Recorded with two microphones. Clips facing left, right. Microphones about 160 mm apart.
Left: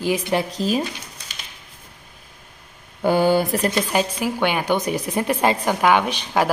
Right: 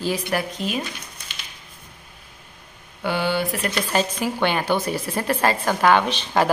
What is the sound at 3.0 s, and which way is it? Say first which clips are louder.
Mantra: left 6 dB; 45° left (ahead or behind).